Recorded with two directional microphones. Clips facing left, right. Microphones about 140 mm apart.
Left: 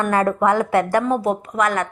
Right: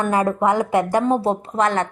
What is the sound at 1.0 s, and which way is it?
Speech, 30° right (ahead or behind).